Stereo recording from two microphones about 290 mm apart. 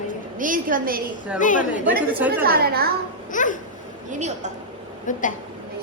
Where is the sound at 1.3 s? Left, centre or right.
Left.